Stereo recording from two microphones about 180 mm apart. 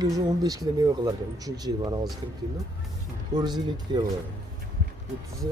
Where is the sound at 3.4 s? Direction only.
25° right (ahead or behind).